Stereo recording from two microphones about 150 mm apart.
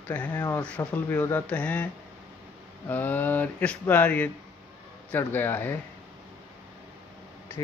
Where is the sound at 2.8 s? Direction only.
10° left (ahead or behind).